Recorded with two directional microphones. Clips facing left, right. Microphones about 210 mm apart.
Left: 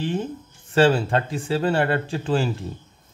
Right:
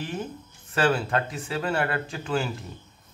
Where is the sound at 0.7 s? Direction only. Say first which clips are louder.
Left 6 dB; 30° left (ahead or behind).